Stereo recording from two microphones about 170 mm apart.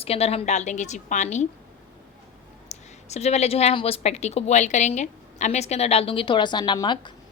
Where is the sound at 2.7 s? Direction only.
40° left (ahead or behind).